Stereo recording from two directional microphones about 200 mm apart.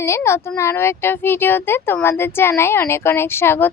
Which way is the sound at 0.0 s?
15° left (ahead or behind).